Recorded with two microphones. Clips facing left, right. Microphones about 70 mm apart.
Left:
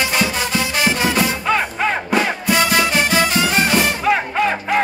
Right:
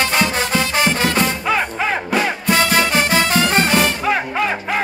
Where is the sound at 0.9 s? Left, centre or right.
Centre.